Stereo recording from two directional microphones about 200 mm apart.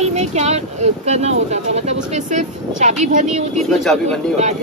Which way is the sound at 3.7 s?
Centre (ahead or behind).